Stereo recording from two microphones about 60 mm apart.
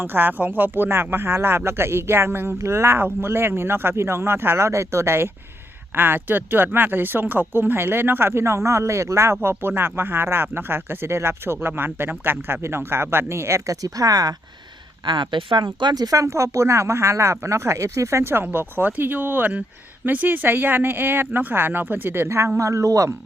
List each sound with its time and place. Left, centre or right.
0.0 s speech: right
6.0 s speech: right
13.7 s speech: right
16.0 s speech: right
18.2 s speech: right
22.5 s speech: right